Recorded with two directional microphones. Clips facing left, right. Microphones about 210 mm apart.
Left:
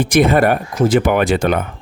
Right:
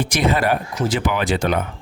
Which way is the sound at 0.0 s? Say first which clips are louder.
Left 7 dB; 55° left (ahead or behind).